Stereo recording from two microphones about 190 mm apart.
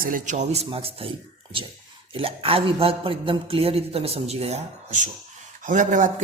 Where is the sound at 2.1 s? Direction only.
30° right (ahead or behind).